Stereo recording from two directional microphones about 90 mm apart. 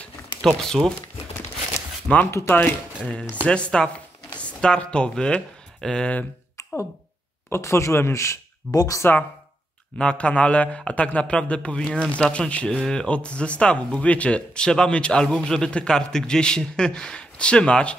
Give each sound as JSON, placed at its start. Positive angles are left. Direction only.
{"t": 0.4, "sound": "speech", "side_deg": 5}
{"t": 2.3, "sound": "speech", "side_deg": 20}
{"t": 3.4, "sound": "a man's voice", "side_deg": 10}
{"t": 7.4, "sound": "speech", "side_deg": 30}
{"t": 9.9, "sound": "a man's voice", "side_deg": 10}